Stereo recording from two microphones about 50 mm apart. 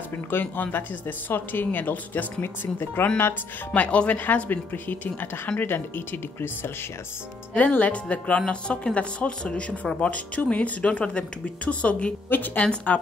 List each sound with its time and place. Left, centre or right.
0.3 s speech: left
2.4 s speech: left
3.7 s speech: left
7.5 s speech: left